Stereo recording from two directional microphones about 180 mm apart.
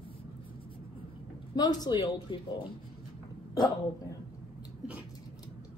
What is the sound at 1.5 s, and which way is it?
A woman's voice, 20° left (ahead or behind).